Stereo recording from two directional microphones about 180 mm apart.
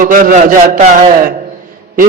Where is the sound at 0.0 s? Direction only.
50° right (ahead or behind).